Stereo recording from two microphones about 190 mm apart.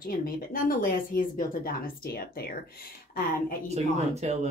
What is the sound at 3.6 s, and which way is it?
Speech, 35° right (ahead or behind).